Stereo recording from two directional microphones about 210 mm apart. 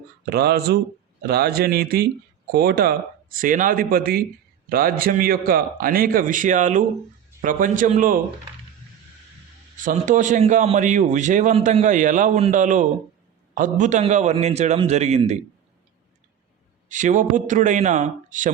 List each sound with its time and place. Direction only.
0.3 s a man's voice: 50° right (ahead or behind)
9.7 s a man's voice: 40° right (ahead or behind)
16.9 s a man's voice: 35° right (ahead or behind)